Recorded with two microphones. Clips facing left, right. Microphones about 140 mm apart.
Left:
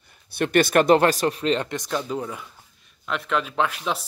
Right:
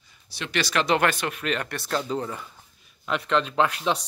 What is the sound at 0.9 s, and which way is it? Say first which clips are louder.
Speech: left 5 dB; 35° left (ahead or behind).